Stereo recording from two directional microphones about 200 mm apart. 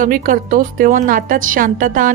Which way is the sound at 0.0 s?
45° right (ahead or behind).